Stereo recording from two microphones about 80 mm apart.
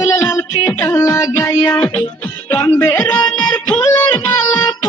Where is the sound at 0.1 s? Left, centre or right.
Left.